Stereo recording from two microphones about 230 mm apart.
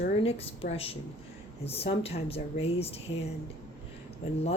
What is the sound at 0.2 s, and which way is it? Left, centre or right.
A woman's voice, left.